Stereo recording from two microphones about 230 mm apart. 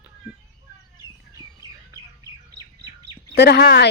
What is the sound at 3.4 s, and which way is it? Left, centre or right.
Speech, left.